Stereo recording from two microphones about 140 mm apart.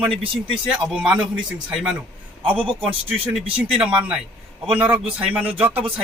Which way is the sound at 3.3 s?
5° right (ahead or behind).